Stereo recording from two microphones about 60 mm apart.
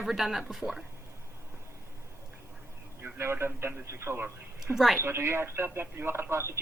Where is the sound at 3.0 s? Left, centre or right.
Right.